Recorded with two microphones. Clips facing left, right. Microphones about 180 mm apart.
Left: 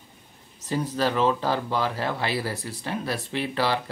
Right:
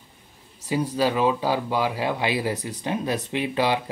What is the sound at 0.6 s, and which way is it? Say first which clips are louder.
Speech: right 3 dB; 10° right (ahead or behind).